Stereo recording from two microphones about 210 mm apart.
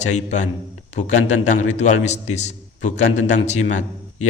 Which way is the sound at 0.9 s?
35° left (ahead or behind).